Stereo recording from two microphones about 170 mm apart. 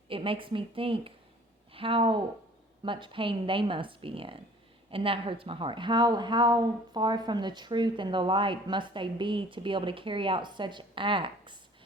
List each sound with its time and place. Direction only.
0.1 s speech: 30° right (ahead or behind)